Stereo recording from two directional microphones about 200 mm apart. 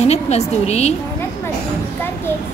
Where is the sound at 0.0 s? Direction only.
35° left (ahead or behind).